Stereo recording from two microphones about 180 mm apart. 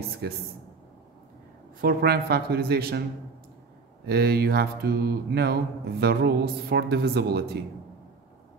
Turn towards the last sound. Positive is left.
turn(degrees=-65)  # may be behind; listen again after turning